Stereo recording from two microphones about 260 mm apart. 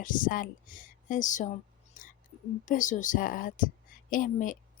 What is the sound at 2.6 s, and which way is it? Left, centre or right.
A woman's voice, left.